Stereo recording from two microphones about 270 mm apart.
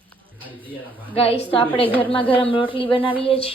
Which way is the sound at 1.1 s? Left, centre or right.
Left.